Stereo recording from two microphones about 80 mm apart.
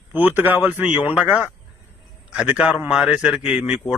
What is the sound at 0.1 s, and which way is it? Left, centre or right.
A man's voice, right.